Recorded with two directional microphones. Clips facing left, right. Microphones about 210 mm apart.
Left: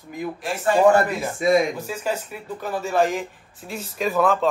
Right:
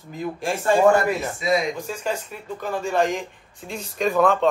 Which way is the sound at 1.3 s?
50° left (ahead or behind).